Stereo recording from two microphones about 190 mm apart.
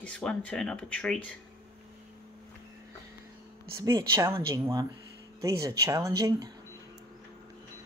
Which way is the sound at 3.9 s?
15° right (ahead or behind).